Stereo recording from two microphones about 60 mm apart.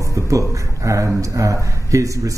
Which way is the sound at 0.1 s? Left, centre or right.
Right.